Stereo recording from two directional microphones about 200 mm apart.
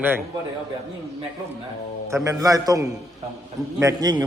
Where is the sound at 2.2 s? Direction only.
15° right (ahead or behind).